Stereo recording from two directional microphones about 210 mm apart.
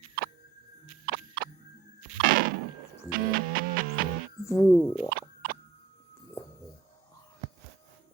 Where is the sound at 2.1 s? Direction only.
45° right (ahead or behind).